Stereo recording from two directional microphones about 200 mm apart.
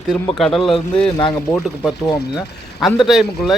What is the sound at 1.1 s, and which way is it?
Speech, 20° left (ahead or behind).